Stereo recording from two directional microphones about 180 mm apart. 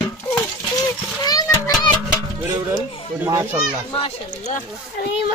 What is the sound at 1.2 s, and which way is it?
Speech, 20° left (ahead or behind).